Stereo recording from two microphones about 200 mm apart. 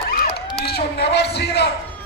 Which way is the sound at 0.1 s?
50° left (ahead or behind).